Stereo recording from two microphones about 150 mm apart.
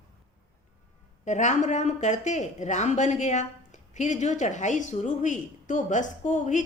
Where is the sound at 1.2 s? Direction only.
55° left (ahead or behind).